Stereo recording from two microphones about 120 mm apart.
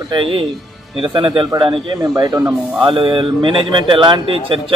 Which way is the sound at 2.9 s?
45° right (ahead or behind).